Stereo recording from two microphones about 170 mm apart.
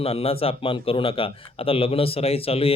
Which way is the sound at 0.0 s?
35° left (ahead or behind).